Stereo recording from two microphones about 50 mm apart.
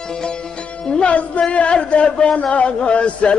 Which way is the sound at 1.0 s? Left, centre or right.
Left.